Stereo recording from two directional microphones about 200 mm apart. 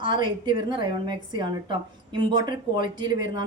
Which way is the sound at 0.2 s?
25° right (ahead or behind).